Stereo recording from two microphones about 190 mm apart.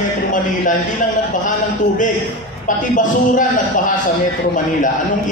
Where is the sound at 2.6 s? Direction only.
45° left (ahead or behind).